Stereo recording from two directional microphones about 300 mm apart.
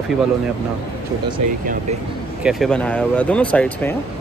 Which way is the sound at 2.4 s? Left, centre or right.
Centre.